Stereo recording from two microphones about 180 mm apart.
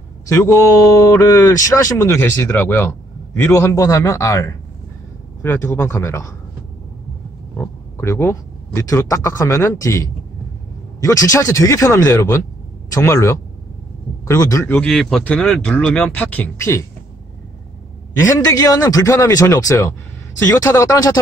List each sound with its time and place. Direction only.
0.3 s speech: 15° left (ahead or behind)
7.5 s speech: 15° left (ahead or behind)
14.8 s speech: centre (ahead or behind)
18.2 s speech: 15° left (ahead or behind)